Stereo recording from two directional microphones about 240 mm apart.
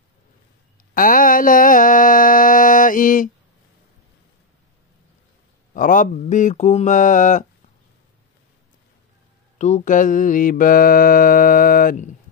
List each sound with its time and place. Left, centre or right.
0.9 s mantra: left
5.8 s mantra: left
9.6 s mantra: left